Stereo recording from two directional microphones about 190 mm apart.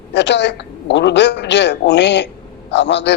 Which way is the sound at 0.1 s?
65° left (ahead or behind).